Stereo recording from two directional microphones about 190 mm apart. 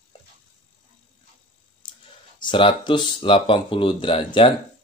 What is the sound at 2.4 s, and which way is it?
Speech, 25° left (ahead or behind).